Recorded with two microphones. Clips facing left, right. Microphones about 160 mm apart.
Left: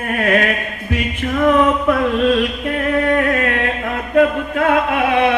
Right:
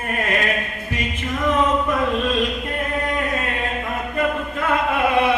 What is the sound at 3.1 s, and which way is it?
Music, 70° left (ahead or behind).